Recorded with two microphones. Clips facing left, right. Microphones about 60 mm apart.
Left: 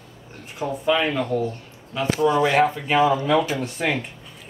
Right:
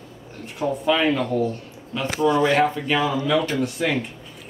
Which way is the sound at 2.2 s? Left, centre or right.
Centre.